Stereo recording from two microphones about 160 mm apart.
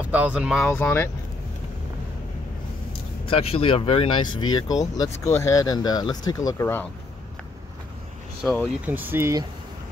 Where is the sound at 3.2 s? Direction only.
35° left (ahead or behind); by 6.8 s 15° left (ahead or behind).